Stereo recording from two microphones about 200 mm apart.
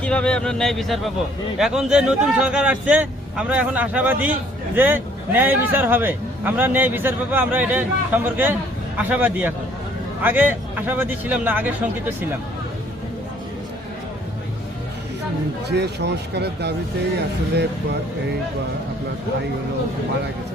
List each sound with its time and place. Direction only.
0.0 s a man's voice: 5° left (ahead or behind)
15.7 s speech: 60° right (ahead or behind)